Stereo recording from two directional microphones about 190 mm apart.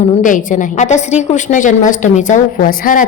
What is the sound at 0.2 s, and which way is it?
A woman's voice, 45° left (ahead or behind).